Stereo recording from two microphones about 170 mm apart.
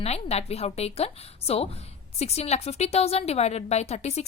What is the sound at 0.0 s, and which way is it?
A woman's voice, 40° left (ahead or behind).